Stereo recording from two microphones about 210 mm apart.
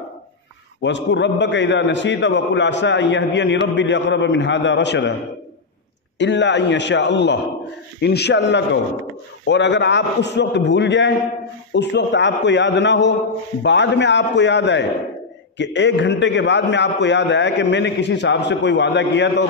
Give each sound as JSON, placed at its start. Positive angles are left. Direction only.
{"t": 0.8, "sound": "a man's voice", "side_deg": 60}
{"t": 6.1, "sound": "a man's voice", "side_deg": 55}